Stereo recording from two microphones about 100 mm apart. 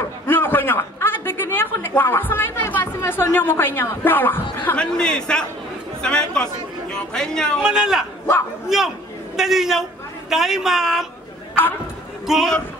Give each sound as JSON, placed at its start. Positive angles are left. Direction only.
{"t": 0.3, "sound": "a man's voice", "side_deg": 20}
{"t": 4.7, "sound": "a man's voice", "side_deg": 10}
{"t": 7.6, "sound": "a man's voice", "side_deg": -5}
{"t": 12.3, "sound": "a woman's voice", "side_deg": 5}